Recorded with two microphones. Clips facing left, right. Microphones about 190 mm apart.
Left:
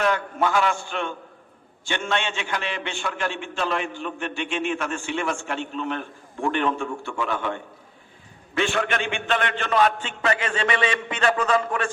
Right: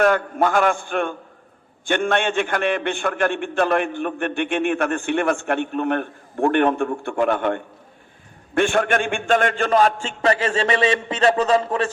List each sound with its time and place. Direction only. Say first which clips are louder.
0.0 s a man's voice: right 5 dB; 50° right (ahead or behind); by 11.9 s 30° right (ahead or behind)